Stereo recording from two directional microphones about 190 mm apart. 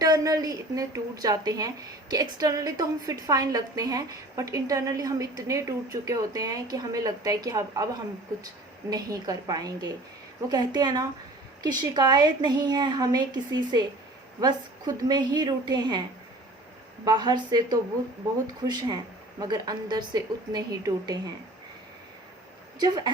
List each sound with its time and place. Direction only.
0.0 s a woman's voice: 20° right (ahead or behind)
8.9 s a woman's voice: 20° right (ahead or behind)
17.1 s a woman's voice: 20° right (ahead or behind)